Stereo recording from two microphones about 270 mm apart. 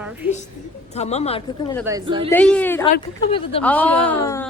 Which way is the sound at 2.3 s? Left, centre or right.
Centre.